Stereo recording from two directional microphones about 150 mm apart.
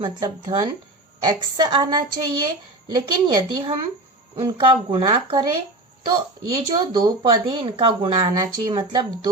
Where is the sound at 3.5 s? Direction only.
35° right (ahead or behind).